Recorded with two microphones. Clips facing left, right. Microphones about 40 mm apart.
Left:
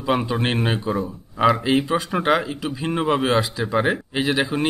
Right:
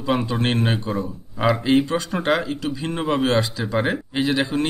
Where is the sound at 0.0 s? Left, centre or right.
Centre.